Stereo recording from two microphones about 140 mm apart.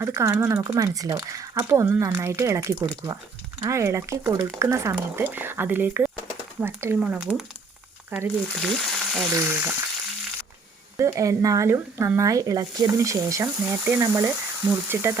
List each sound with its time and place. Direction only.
0.0 s speech: 20° right (ahead or behind)
8.6 s frying: centre (ahead or behind)
9.3 s speech: 15° right (ahead or behind)
10.9 s speech: 20° right (ahead or behind)